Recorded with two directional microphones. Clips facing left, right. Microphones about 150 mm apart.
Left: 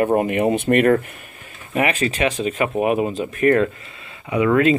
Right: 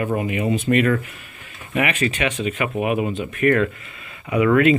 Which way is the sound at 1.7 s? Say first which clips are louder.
Left 2 dB; 35° left (ahead or behind).